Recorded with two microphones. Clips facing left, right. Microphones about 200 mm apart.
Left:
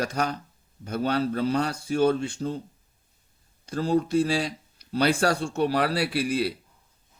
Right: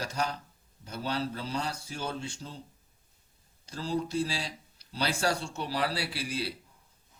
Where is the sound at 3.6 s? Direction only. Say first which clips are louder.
Left 8 dB; 55° left (ahead or behind).